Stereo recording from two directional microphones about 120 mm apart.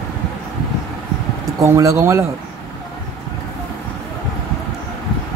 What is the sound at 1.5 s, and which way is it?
Speech, 30° right (ahead or behind).